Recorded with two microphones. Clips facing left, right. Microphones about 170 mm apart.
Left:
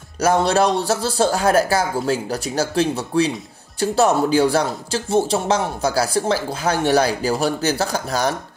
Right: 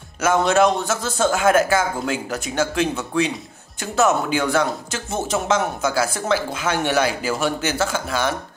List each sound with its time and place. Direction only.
0.2 s speech: 35° left (ahead or behind)